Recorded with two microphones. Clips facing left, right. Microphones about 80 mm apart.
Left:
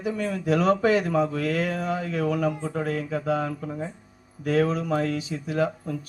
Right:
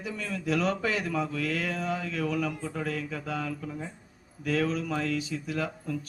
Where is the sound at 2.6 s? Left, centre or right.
Left.